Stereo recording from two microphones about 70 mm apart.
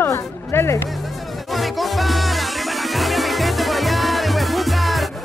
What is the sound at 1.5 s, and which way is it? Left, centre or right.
Music, centre.